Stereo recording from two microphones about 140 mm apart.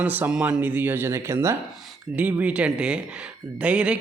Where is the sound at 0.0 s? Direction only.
10° right (ahead or behind).